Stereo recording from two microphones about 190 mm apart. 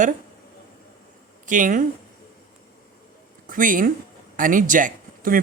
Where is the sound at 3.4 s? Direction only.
45° right (ahead or behind).